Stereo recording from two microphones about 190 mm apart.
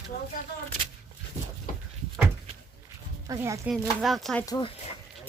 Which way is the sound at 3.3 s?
15° right (ahead or behind).